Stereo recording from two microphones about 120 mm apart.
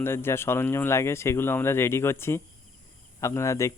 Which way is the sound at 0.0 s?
20° left (ahead or behind).